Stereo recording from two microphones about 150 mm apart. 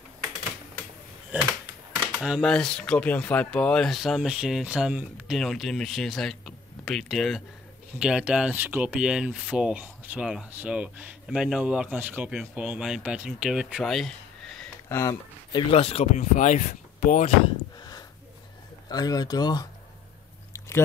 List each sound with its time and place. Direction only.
2.1 s speech: 5° right (ahead or behind)
14.9 s speech: 20° left (ahead or behind)
15.5 s speech: 40° left (ahead or behind); by 17.3 s 55° left (ahead or behind)
17.7 s a sound: 25° left (ahead or behind)
18.9 s speech: 25° left (ahead or behind)
20.5 s chewing: 20° left (ahead or behind)